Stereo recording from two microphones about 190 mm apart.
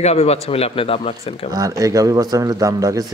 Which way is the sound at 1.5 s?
20° right (ahead or behind).